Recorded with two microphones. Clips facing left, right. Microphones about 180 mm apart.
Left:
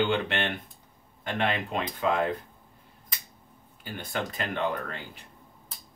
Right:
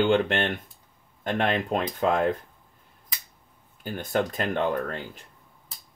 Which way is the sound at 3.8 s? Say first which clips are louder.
Right 7 dB; 50° right (ahead or behind).